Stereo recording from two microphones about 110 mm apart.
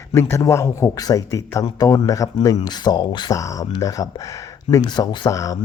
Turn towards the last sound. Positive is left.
turn(degrees=30)  # may be behind; listen again after turning